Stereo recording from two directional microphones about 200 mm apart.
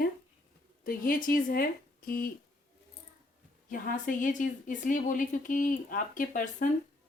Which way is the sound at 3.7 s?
45° left (ahead or behind).